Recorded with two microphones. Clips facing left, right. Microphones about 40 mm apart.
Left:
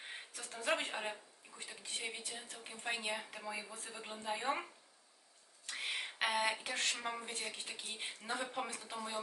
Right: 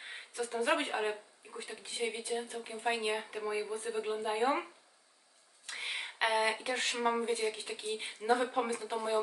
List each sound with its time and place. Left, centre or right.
0.0 s speech: centre
5.7 s speech: centre
7.0 s speech: centre
7.3 s speech: centre